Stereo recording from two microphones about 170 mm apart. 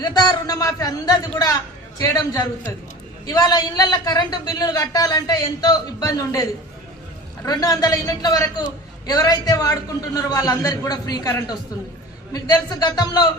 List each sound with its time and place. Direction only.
0.0 s a man's voice: 25° left (ahead or behind)